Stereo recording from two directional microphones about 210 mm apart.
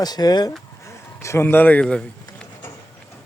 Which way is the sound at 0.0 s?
20° left (ahead or behind).